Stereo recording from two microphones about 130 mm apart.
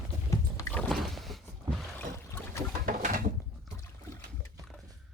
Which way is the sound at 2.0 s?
20° left (ahead or behind).